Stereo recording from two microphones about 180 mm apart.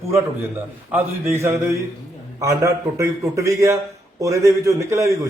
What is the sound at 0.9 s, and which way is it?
A man's voice, 15° right (ahead or behind).